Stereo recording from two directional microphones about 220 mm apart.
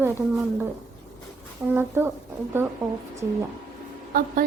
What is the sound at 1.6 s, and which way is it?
A woman's voice, 10° right (ahead or behind).